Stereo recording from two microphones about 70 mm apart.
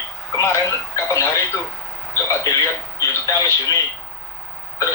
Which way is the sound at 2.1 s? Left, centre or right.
Left.